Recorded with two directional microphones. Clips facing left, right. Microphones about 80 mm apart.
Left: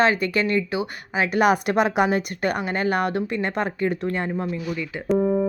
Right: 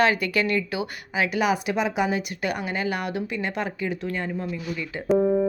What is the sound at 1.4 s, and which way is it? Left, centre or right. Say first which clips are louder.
A woman's voice: left 6 dB; left.